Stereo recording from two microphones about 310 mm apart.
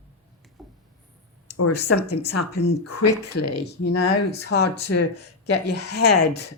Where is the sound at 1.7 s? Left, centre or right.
Left.